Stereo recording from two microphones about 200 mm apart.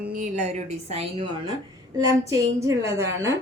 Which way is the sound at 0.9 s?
25° right (ahead or behind).